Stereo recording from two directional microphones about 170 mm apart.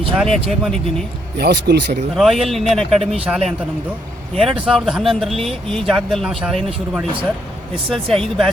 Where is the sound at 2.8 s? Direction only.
Centre (ahead or behind).